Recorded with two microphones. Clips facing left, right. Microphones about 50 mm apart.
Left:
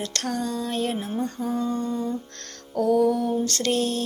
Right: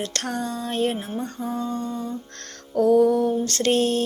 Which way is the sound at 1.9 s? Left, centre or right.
Centre.